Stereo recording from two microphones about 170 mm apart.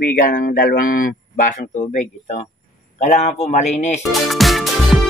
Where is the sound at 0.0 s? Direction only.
55° left (ahead or behind).